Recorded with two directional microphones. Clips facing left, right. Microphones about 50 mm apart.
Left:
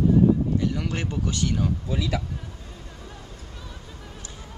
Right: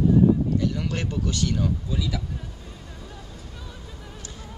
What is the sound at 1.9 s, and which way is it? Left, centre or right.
Speech, left.